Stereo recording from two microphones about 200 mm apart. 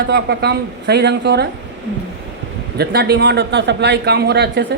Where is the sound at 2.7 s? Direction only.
55° right (ahead or behind).